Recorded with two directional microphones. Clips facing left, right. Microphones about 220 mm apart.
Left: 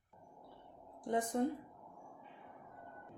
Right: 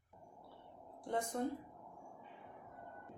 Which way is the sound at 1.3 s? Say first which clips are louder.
Left 5 dB; 15° left (ahead or behind).